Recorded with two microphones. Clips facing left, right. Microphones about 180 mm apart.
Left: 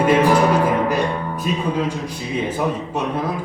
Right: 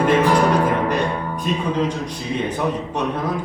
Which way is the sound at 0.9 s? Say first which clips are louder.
Left 1 dB; 5° left (ahead or behind).